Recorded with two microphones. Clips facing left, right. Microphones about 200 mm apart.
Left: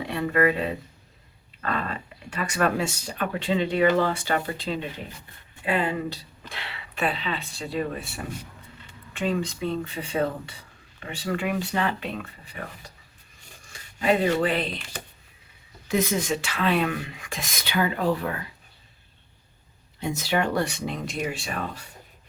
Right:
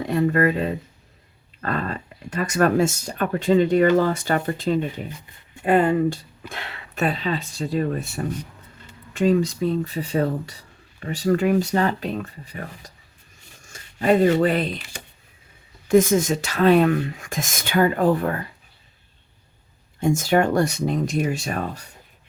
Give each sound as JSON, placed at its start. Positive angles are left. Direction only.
{"t": 0.0, "sound": "speech", "side_deg": -40}
{"t": 15.9, "sound": "speech", "side_deg": -50}
{"t": 20.0, "sound": "speech", "side_deg": -50}